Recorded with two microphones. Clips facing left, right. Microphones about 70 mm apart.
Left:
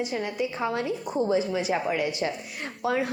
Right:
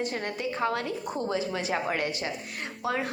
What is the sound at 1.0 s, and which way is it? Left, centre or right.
A woman's voice, centre.